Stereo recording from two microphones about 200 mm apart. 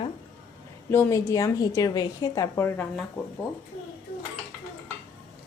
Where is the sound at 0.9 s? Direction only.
15° left (ahead or behind).